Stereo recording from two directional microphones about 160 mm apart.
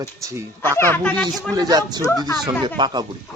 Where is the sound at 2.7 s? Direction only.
25° right (ahead or behind).